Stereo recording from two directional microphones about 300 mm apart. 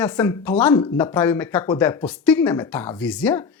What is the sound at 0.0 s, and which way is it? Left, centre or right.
Speech, centre.